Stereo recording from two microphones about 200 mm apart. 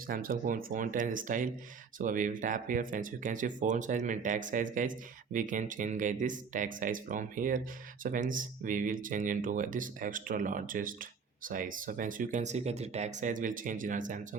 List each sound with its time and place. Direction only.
0.1 s speech: 45° right (ahead or behind)